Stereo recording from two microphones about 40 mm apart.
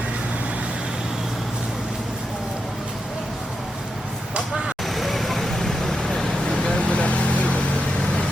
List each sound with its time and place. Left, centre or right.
4.4 s vehicle: centre
4.9 s vehicle: centre
6.5 s vehicle: left